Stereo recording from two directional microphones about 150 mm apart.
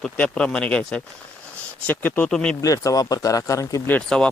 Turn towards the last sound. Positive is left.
turn(degrees=10)  # may be behind; listen again after turning